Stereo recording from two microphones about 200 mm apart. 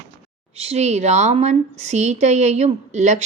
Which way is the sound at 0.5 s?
30° right (ahead or behind).